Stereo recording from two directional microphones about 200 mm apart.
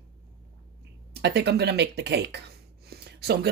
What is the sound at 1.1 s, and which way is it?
Speech, 55° right (ahead or behind).